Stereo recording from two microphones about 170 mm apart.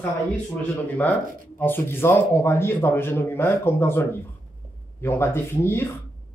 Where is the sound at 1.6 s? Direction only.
10° left (ahead or behind).